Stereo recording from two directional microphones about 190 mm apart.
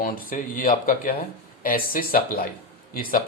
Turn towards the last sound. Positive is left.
turn(degrees=50)  # may be behind; listen again after turning